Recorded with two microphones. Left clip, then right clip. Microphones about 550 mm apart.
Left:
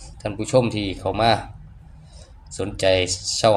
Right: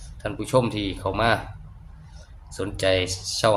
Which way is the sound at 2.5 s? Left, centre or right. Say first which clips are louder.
Left 3 dB; right.